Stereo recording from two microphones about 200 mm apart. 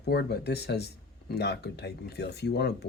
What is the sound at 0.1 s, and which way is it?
Speech, 55° left (ahead or behind).